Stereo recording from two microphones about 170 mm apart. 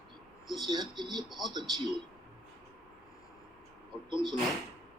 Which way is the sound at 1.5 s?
25° right (ahead or behind).